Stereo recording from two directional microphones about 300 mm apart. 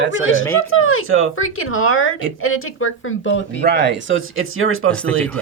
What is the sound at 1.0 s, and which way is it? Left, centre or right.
Speech, right.